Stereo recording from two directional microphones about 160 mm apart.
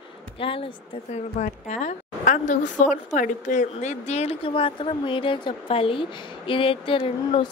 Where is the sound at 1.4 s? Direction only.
50° left (ahead or behind).